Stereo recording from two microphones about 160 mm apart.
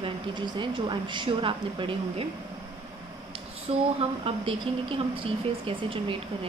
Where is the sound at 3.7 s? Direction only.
35° right (ahead or behind).